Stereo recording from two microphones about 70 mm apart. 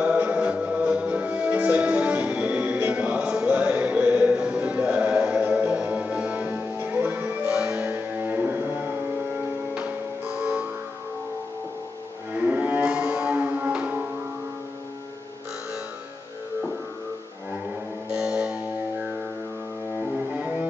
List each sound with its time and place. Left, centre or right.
0.3 s music: centre
7.4 s music: centre
7.9 s music: right
12.4 s music: right
18.1 s music: centre